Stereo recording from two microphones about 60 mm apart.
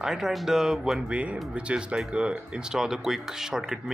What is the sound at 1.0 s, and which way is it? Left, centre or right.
Speech, right.